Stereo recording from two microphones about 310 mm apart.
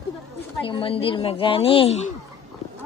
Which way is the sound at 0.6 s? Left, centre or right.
Centre.